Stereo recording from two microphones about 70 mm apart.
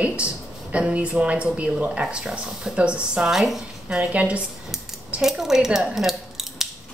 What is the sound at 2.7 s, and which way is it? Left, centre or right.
Speech, centre.